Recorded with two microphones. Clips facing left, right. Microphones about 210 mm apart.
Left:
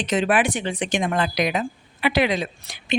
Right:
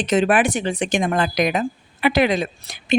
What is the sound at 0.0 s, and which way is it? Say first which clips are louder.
Speech: right 3 dB; 45° right (ahead or behind).